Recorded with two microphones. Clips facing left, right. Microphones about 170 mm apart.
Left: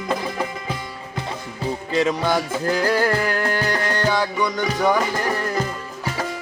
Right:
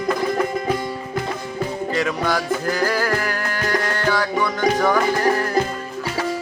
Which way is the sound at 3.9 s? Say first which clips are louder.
Even; 20° left (ahead or behind).